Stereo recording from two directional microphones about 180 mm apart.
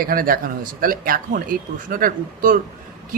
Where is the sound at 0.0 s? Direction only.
55° right (ahead or behind).